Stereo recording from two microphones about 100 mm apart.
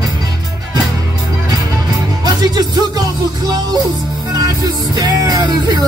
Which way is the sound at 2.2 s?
45° right (ahead or behind).